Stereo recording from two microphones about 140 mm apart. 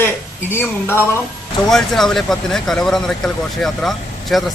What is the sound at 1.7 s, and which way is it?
Speech, centre (ahead or behind).